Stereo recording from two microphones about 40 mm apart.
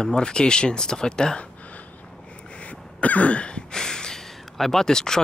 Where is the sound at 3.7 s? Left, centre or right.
Centre.